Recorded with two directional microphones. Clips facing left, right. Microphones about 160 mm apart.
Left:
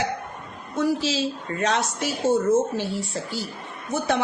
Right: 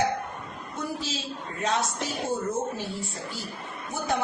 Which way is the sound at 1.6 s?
80° left.